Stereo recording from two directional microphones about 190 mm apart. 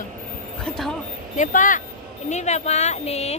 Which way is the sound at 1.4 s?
45° left (ahead or behind).